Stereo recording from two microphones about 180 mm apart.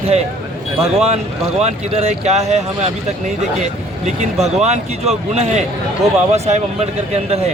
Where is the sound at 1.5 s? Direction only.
35° right (ahead or behind).